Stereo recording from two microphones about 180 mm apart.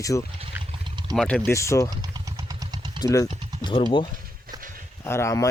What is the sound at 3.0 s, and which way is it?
Speech, 20° left (ahead or behind).